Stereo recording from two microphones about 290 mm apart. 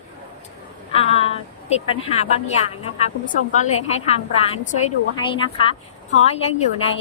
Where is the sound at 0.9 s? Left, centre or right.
Centre.